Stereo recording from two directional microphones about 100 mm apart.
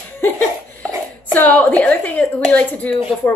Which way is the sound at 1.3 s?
15° left (ahead or behind).